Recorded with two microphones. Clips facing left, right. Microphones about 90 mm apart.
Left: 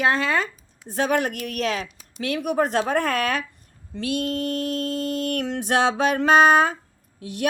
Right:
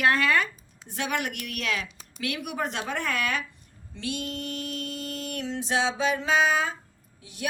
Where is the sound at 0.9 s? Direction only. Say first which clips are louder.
Left 8 dB; 40° left (ahead or behind).